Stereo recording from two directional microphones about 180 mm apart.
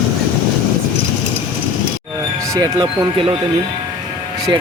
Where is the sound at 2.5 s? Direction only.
25° right (ahead or behind).